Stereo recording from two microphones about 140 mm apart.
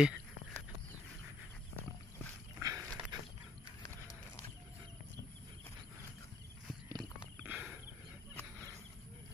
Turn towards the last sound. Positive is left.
turn(degrees=-10)  # may be behind; listen again after turning